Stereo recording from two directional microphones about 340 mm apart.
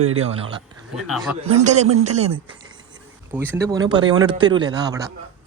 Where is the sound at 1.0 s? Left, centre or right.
Centre.